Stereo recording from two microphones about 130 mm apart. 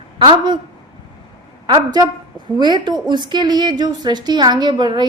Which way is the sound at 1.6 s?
30° right (ahead or behind).